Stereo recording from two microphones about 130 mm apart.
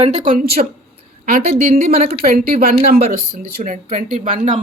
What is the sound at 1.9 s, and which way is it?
Speech, 90° right.